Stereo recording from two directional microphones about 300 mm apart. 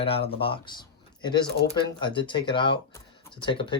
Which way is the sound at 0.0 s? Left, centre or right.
Centre.